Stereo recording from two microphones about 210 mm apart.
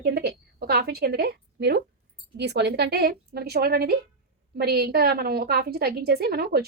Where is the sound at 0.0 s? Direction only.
50° right (ahead or behind).